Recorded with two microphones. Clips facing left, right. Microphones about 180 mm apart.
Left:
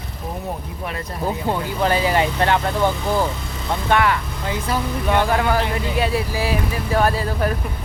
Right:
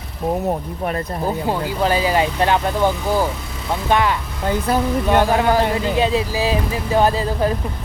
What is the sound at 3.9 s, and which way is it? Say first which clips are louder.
Speech: even; 20° right (ahead or behind).